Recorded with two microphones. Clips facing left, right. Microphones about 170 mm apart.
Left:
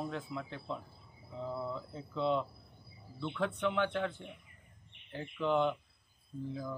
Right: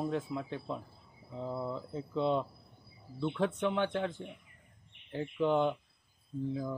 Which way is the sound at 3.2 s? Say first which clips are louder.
Right 4 dB; 25° right (ahead or behind).